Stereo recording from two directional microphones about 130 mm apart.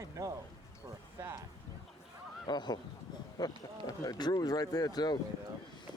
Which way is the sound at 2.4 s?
35° left (ahead or behind).